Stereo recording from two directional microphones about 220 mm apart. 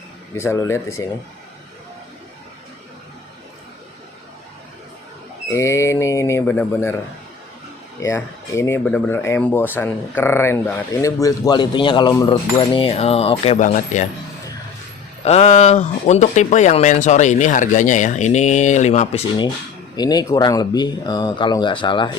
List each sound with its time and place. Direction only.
0.3 s speech: 10° left (ahead or behind)
5.5 s speech: 15° left (ahead or behind)
8.0 s speech: 10° left (ahead or behind); by 14.1 s 30° left (ahead or behind)
15.2 s speech: 30° left (ahead or behind)
20.0 s speech: 20° left (ahead or behind)